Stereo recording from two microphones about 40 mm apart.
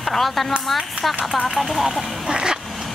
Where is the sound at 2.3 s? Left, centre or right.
Right.